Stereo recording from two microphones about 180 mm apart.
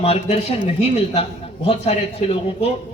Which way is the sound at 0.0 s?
35° left (ahead or behind).